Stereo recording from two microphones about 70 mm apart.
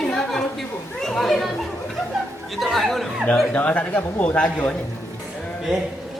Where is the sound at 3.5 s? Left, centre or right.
Left.